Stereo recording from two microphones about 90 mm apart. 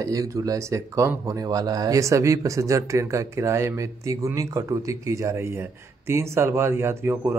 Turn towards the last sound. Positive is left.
turn(degrees=-25)  # may be behind; listen again after turning